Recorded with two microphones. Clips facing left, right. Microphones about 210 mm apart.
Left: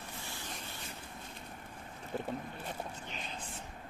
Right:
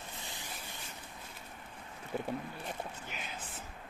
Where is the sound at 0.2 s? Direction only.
20° right (ahead or behind).